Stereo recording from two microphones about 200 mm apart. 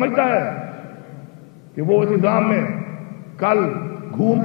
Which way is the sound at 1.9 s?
20° left (ahead or behind).